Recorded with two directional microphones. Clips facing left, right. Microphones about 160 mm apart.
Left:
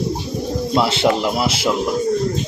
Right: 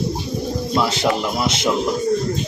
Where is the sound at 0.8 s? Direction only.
25° left (ahead or behind).